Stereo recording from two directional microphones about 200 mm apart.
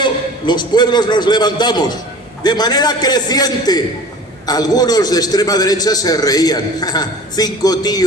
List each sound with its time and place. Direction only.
0.0 s a man's voice: 20° left (ahead or behind)